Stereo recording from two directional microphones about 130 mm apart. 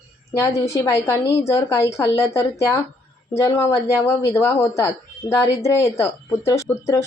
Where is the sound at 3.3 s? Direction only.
20° left (ahead or behind).